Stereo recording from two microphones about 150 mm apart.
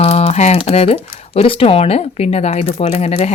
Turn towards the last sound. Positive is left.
turn(degrees=45)  # may be behind; listen again after turning